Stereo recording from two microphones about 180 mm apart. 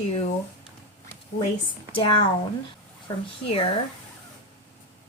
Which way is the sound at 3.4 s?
35° left (ahead or behind).